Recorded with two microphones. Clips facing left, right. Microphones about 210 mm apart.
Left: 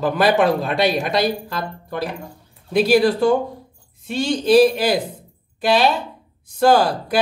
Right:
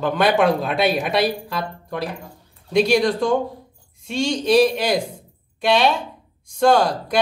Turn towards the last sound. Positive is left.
turn(degrees=5)  # may be behind; listen again after turning